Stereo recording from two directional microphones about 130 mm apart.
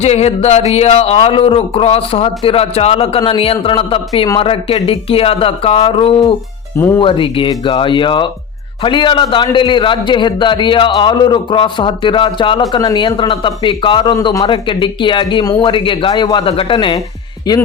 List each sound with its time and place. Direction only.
0.0 s a sound: 55° left (ahead or behind)
0.7 s speech: 55° left (ahead or behind)
6.7 s speech: 20° left (ahead or behind)
7.0 s a man's voice: 40° left (ahead or behind)
14.4 s a man's voice: 40° left (ahead or behind)